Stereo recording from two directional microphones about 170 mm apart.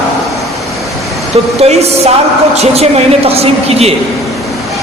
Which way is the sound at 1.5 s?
40° right (ahead or behind).